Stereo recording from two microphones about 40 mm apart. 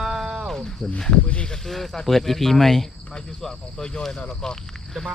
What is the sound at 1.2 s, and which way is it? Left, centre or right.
Speech, left.